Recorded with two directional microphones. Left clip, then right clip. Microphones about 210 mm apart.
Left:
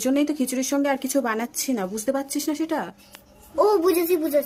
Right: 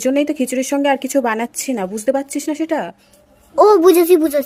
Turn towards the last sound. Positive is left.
turn(degrees=-45)  # may be behind; listen again after turning